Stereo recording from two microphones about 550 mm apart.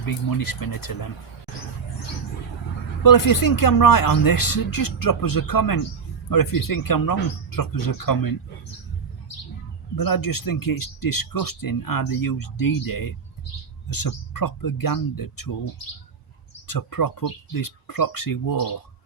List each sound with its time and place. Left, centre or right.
0.0 s speech: left
3.0 s speech: left
9.9 s speech: left
16.6 s speech: left